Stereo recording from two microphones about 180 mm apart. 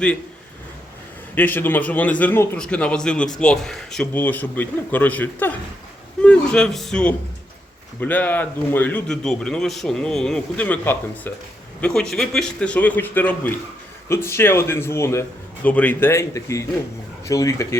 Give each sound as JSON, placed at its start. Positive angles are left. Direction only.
{"t": 1.4, "sound": "a man's voice", "side_deg": 10}